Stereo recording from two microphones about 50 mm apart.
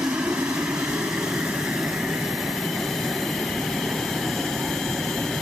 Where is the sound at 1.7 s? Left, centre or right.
Centre.